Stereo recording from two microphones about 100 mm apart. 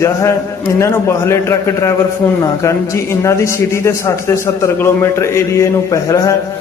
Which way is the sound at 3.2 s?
30° left (ahead or behind).